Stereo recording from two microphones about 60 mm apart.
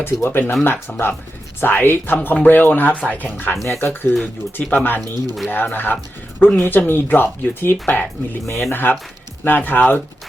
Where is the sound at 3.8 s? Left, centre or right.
Left.